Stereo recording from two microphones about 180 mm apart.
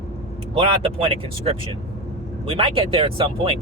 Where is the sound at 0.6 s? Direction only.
30° right (ahead or behind).